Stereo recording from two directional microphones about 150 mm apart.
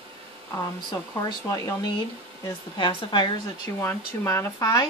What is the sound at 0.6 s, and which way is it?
Speech, 25° left (ahead or behind).